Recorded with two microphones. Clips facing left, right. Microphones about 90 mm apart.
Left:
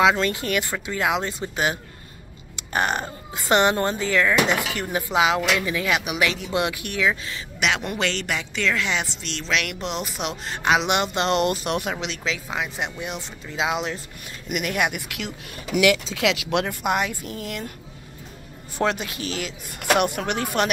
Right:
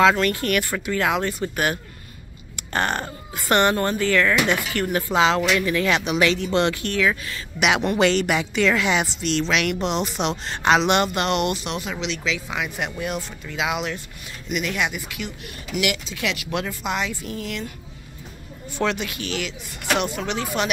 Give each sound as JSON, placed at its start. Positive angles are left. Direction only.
{"t": 0.0, "sound": "speech", "side_deg": 15}
{"t": 7.6, "sound": "a woman's voice", "side_deg": -5}
{"t": 10.8, "sound": "speech", "side_deg": 15}
{"t": 11.1, "sound": "speech", "side_deg": 35}
{"t": 12.4, "sound": "speech", "side_deg": 30}
{"t": 14.5, "sound": "speech", "side_deg": 55}
{"t": 18.8, "sound": "speech", "side_deg": 35}
{"t": 19.9, "sound": "speech", "side_deg": 55}